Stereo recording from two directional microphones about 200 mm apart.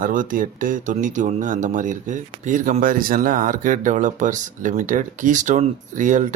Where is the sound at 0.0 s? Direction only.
40° right (ahead or behind).